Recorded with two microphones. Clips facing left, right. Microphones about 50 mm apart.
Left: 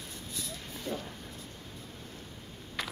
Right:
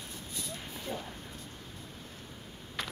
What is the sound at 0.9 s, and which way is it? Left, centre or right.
Dog, centre.